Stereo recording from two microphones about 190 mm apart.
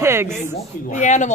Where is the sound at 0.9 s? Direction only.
40° left (ahead or behind).